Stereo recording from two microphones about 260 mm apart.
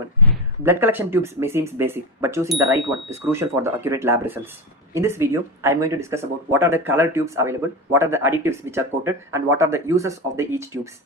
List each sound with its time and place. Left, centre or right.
0.6 s speech: centre